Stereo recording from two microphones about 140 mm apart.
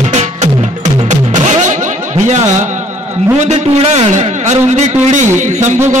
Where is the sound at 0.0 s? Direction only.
50° right (ahead or behind).